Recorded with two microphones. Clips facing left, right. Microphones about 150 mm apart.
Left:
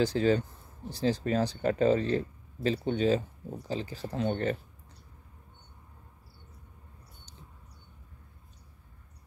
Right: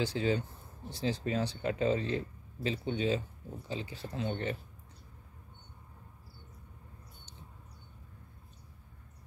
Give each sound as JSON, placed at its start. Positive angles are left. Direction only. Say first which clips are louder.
{"t": 0.0, "sound": "speech", "louder": "left 6 dB", "side_deg": 40}